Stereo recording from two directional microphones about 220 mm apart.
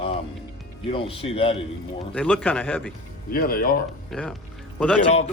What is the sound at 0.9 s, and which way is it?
Speech, 25° left (ahead or behind).